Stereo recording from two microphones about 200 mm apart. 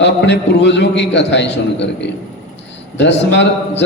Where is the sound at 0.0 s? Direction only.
60° left (ahead or behind).